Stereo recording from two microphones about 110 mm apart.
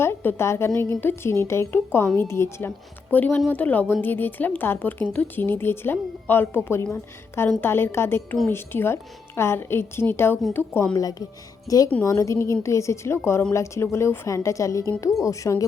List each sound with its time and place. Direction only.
0.0 s a woman's voice: 20° left (ahead or behind)
11.7 s a woman's voice: 35° left (ahead or behind)